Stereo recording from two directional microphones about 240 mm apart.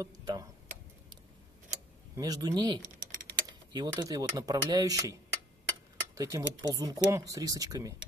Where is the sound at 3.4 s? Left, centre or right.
Centre.